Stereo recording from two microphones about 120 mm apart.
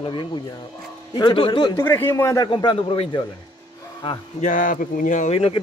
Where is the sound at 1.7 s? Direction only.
20° left (ahead or behind).